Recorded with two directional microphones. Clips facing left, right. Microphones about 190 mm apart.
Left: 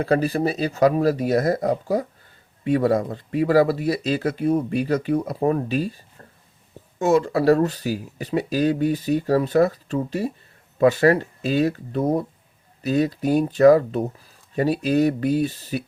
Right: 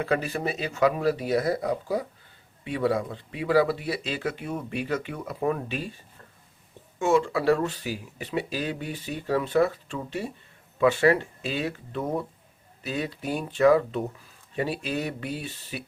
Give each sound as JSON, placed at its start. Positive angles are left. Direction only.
{"t": 0.0, "sound": "speech", "side_deg": 35}
{"t": 7.0, "sound": "speech", "side_deg": 40}